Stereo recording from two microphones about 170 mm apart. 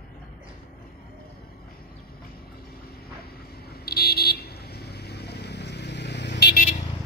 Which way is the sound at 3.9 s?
65° left (ahead or behind).